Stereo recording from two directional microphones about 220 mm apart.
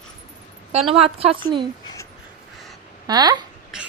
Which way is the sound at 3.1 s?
20° right (ahead or behind).